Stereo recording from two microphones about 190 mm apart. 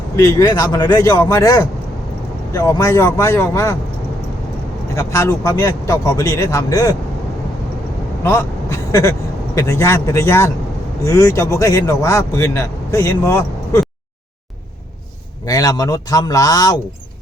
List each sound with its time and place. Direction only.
0.2 s speech: 15° left (ahead or behind)
4.9 s speech: 15° left (ahead or behind)
8.2 s vehicle: 15° left (ahead or behind)
9.6 s speech: 15° left (ahead or behind)
15.4 s speech: 20° left (ahead or behind)